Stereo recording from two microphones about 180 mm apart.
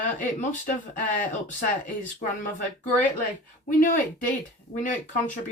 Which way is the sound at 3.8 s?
50° left (ahead or behind).